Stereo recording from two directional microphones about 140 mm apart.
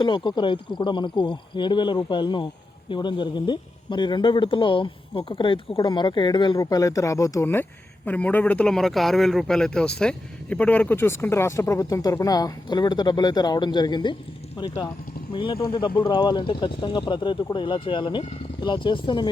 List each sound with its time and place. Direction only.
0.0 s speech: 35° left (ahead or behind)